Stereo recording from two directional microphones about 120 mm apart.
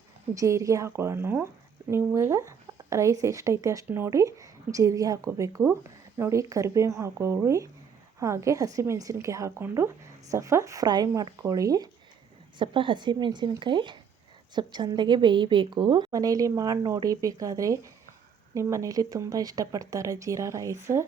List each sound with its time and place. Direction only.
0.3 s a woman's voice: 25° right (ahead or behind)
12.5 s a woman's voice: 45° right (ahead or behind); by 21.0 s 25° right (ahead or behind)